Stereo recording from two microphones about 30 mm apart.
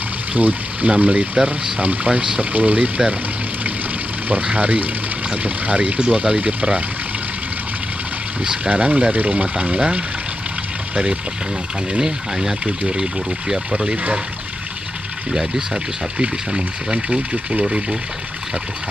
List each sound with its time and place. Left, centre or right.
0.4 s speech: right
0.8 s speech: right
2.1 s speech: right
4.5 s speech: right
5.9 s speech: right
8.6 s speech: right
9.8 s speech: right
12.6 s speech: right
15.7 s speech: right